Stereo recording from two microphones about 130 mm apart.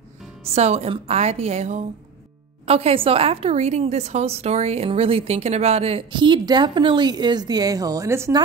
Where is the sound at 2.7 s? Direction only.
50° right (ahead or behind).